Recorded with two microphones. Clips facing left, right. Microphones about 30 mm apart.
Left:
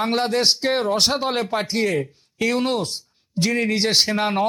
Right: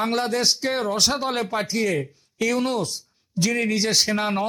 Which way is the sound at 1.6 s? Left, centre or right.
Left.